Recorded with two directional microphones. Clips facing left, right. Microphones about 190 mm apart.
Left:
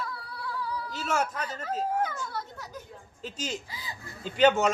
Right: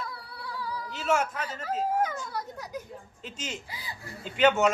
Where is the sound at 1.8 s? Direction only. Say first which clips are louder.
Right 2 dB; 10° right (ahead or behind).